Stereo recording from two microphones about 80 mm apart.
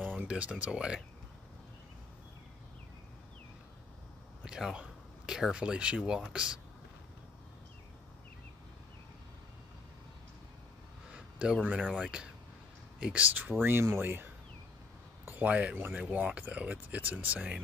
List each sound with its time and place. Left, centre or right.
0.0 s speech: centre
4.5 s speech: centre
11.1 s a sound: centre
13.0 s speech: centre